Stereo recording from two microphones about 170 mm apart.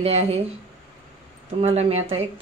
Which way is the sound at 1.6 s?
40° right (ahead or behind).